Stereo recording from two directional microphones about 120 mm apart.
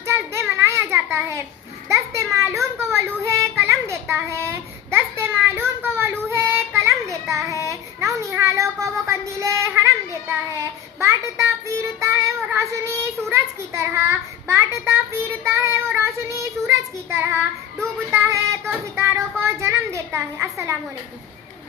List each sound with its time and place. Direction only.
0.0 s a sound: 25° right (ahead or behind)
1.9 s a child's voice: 25° right (ahead or behind)
2.9 s child singing: 25° right (ahead or behind)
18.9 s a child's voice: 25° right (ahead or behind)